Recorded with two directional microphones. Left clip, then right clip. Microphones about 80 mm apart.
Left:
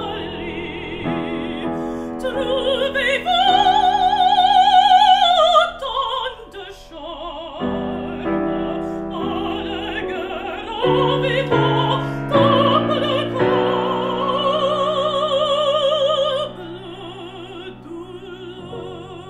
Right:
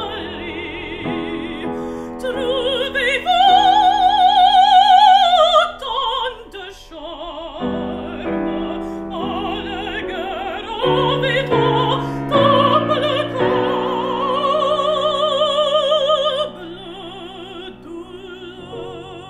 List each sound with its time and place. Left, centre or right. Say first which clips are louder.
0.0 s opera: even; right
1.1 s music: left 1 dB; right
8.5 s music: even; centre
8.7 s music: left 1 dB; centre
9.1 s music: right 2 dB; right
11.4 s music: right 2 dB; centre
12.4 s music: right 1 dB; right
13.4 s music: left 1 dB; centre
13.7 s opera: right 1 dB; right